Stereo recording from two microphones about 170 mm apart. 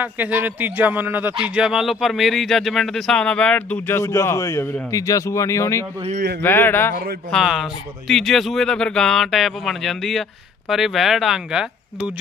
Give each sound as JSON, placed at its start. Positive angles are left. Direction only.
{"t": 0.0, "sound": "speech", "side_deg": -10}
{"t": 6.1, "sound": "a man's voice", "side_deg": -65}
{"t": 6.4, "sound": "speech", "side_deg": 10}
{"t": 7.3, "sound": "speech", "side_deg": 0}